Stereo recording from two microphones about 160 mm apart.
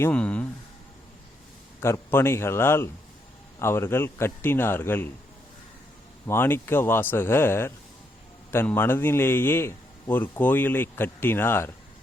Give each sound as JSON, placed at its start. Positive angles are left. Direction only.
{"t": 0.0, "sound": "a man's voice", "side_deg": 10}
{"t": 1.8, "sound": "a man's voice", "side_deg": 15}
{"t": 6.2, "sound": "a man's voice", "side_deg": 15}